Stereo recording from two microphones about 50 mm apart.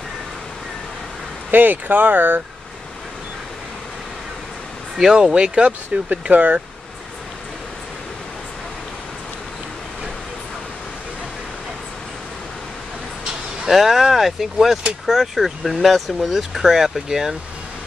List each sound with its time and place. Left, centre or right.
1.5 s speech: right
4.9 s speech: centre
6.3 s speech: right
13.7 s speech: centre